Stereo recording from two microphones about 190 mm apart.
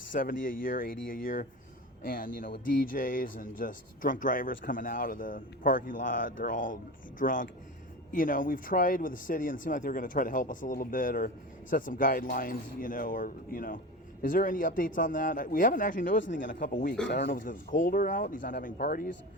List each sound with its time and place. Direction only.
0.1 s speech: 45° left (ahead or behind)